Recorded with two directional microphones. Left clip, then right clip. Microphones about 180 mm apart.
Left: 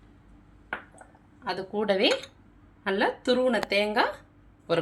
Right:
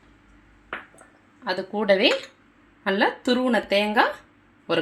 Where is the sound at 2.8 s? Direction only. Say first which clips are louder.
Right 3 dB; 25° right (ahead or behind).